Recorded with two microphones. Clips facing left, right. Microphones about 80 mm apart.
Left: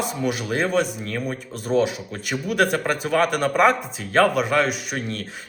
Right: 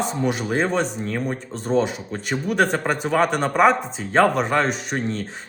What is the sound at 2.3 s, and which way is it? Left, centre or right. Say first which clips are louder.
Speech: right 2 dB; right.